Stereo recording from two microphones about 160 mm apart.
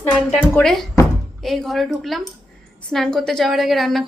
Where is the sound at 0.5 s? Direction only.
5° left (ahead or behind).